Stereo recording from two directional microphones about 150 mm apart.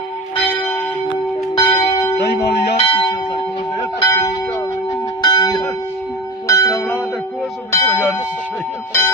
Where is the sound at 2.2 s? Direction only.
90° left.